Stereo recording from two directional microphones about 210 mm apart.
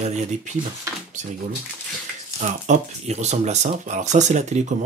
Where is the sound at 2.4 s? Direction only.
35° right (ahead or behind).